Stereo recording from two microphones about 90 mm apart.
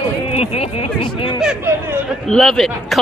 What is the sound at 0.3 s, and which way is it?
Speech, 90° left.